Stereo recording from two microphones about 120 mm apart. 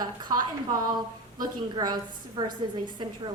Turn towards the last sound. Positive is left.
turn(degrees=-40)  # may be behind; listen again after turning